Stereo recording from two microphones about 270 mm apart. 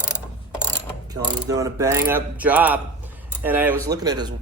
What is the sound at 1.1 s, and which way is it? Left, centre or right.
Speech, centre.